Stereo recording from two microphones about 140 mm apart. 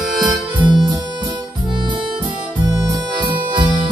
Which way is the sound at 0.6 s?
35° right (ahead or behind).